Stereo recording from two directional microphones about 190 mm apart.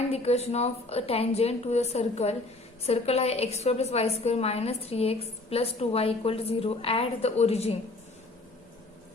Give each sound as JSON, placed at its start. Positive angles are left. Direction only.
{"t": 0.1, "sound": "a woman's voice", "side_deg": 35}